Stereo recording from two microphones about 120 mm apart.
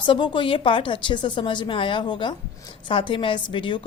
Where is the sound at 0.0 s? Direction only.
40° left (ahead or behind).